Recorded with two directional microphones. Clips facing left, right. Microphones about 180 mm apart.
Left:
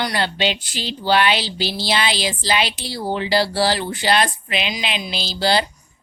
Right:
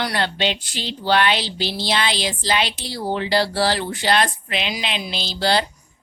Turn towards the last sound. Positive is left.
turn(degrees=5)  # may be behind; listen again after turning